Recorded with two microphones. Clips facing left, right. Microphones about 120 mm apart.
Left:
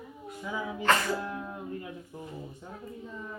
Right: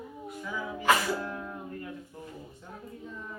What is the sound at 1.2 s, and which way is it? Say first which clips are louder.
Music: left 1 dB; 10° left (ahead or behind).